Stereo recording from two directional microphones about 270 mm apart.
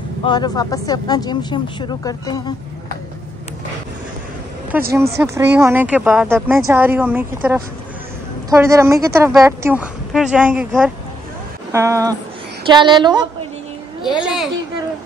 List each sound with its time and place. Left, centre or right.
0.2 s speech: centre
4.9 s speech: centre
14.2 s a child's voice: centre